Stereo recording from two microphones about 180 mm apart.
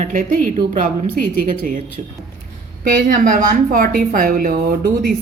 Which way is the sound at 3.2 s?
50° right (ahead or behind).